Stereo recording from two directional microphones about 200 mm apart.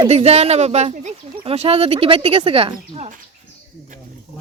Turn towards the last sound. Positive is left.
turn(degrees=-30)  # may be behind; listen again after turning